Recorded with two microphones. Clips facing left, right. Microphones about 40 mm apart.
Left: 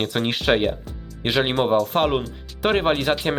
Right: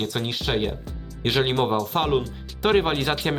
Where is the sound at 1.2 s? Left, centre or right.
Centre.